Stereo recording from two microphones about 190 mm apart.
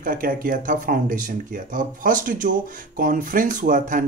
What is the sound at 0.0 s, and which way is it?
Speech, 45° right (ahead or behind).